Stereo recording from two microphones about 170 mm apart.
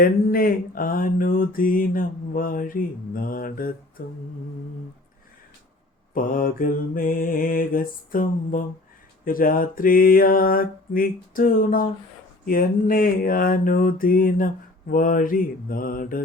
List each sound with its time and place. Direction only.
0.0 s mantra: 55° left (ahead or behind)
6.1 s mantra: 55° left (ahead or behind)